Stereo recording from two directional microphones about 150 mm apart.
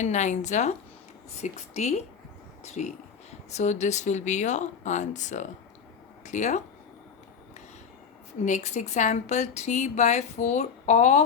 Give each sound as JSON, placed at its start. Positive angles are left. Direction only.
{"t": 0.0, "sound": "a woman's voice", "side_deg": 50}
{"t": 8.4, "sound": "a woman's voice", "side_deg": 50}